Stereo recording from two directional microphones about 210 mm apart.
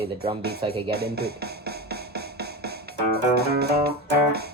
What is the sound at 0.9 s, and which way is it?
Music, 50° right (ahead or behind).